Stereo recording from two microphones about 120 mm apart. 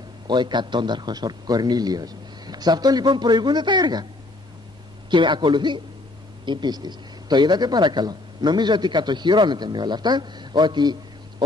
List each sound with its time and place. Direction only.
0.3 s a man's voice: 40° right (ahead or behind)
5.1 s a man's voice: 40° right (ahead or behind)